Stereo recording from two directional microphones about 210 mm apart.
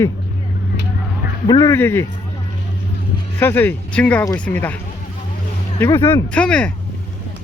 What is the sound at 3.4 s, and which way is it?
Speech, 10° left (ahead or behind).